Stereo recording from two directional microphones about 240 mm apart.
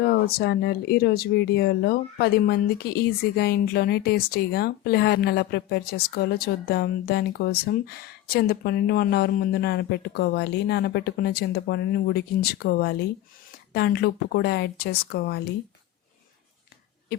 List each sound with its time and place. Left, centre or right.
0.0 s speech: left
17.1 s speech: left